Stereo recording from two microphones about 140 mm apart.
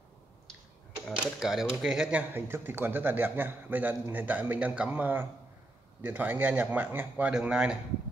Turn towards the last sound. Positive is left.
turn(degrees=-10)  # may be behind; listen again after turning